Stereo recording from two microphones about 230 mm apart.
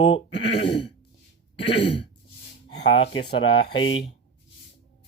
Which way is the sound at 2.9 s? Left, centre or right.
Left.